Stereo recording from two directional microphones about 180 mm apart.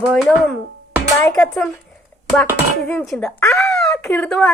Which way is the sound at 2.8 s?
5° left (ahead or behind).